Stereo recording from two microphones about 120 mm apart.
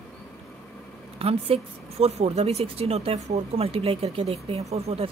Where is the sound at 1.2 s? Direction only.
55° right (ahead or behind).